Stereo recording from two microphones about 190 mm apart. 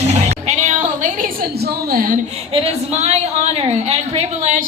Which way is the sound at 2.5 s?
30° right (ahead or behind).